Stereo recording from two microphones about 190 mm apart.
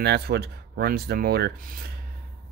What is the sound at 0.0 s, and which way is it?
Speech, 60° right (ahead or behind).